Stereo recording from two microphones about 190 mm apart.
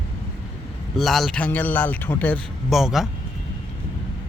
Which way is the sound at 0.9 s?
Centre (ahead or behind).